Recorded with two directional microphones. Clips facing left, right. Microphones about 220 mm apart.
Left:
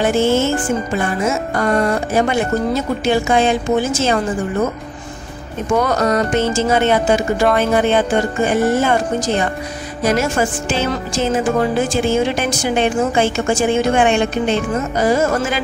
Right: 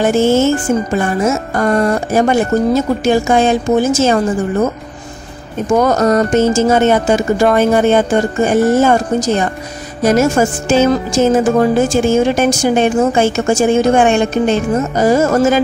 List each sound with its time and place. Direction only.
0.0 s speech: 45° right (ahead or behind)
5.8 s speech: 45° right (ahead or behind)